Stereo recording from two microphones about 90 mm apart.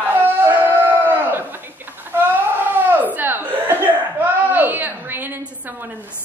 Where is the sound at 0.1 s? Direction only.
25° right (ahead or behind).